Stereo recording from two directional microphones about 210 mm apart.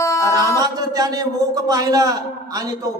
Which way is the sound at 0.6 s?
20° right (ahead or behind).